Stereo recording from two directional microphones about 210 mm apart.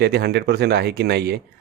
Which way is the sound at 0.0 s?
50° right (ahead or behind).